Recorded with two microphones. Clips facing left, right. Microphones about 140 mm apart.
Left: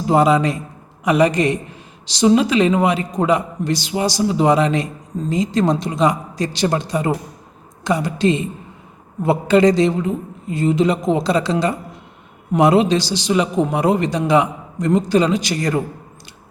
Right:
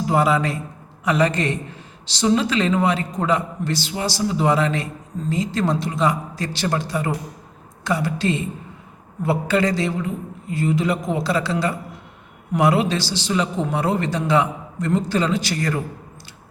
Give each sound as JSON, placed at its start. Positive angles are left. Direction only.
{"t": 0.0, "sound": "a woman's voice", "side_deg": 20}